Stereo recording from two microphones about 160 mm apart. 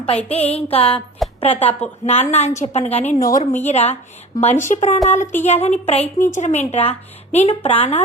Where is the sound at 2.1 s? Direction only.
40° left (ahead or behind).